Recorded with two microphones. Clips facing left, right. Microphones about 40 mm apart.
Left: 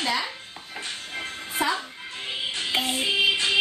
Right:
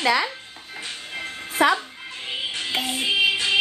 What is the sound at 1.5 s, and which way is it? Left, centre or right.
Music, right.